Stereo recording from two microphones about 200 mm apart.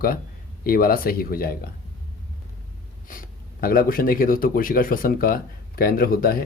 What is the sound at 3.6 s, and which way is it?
Speech, 45° left (ahead or behind).